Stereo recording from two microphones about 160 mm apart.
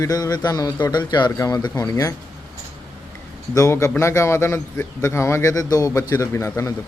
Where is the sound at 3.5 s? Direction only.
20° left (ahead or behind).